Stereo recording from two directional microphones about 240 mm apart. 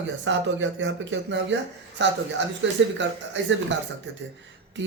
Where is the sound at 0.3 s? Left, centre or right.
Right.